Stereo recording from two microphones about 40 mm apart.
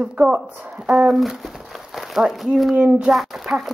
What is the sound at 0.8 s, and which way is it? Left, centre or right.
Speech, centre.